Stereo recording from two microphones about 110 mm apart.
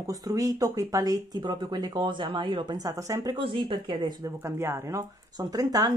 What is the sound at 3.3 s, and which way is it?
Speech, 50° right (ahead or behind).